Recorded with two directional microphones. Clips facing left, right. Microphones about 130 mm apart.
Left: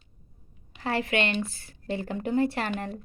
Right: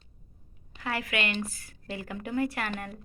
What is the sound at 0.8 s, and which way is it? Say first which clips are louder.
A woman's voice: left 5 dB; 30° left (ahead or behind).